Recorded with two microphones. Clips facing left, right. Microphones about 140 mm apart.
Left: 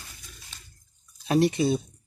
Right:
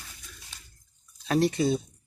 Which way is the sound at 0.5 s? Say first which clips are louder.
Left 1 dB; 10° right (ahead or behind).